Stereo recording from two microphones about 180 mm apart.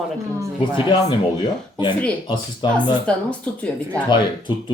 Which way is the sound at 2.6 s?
25° left (ahead or behind).